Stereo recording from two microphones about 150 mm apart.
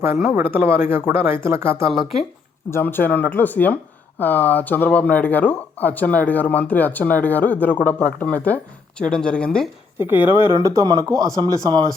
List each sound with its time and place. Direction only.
0.5 s speech: 15° right (ahead or behind)
2.6 s speech: 15° left (ahead or behind)
10.0 s speech: 15° right (ahead or behind)